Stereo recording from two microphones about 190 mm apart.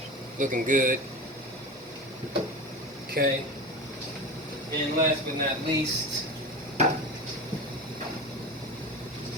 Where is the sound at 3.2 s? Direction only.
50° right (ahead or behind).